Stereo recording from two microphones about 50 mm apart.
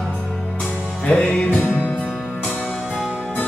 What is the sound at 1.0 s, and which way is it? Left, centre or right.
Music, left.